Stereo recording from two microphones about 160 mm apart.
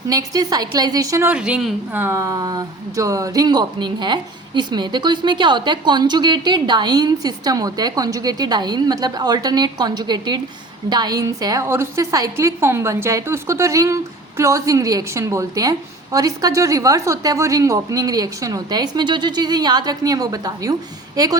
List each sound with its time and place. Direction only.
0.1 s a woman's voice: 25° right (ahead or behind)
1.3 s a woman's voice: 5° right (ahead or behind); by 21.3 s 25° right (ahead or behind)